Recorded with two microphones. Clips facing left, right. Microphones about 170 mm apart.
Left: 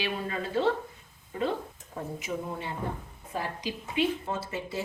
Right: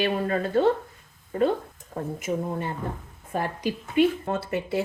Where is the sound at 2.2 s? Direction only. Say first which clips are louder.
Right 7 dB; 50° right (ahead or behind).